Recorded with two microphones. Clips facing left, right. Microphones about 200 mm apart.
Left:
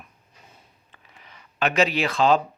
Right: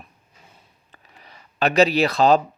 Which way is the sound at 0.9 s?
35° right (ahead or behind).